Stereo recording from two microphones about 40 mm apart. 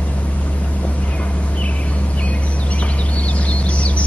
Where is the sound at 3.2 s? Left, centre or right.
Left.